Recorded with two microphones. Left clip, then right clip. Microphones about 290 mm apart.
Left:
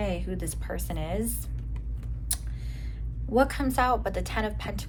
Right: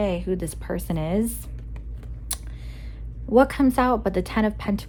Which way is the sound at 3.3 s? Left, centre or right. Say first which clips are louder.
Right 7 dB; right.